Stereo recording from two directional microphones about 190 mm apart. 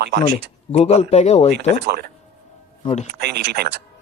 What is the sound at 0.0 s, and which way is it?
Speech, 65° right (ahead or behind).